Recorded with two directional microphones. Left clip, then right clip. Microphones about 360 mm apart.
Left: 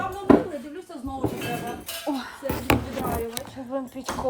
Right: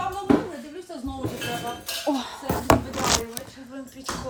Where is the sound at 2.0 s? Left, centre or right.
Left.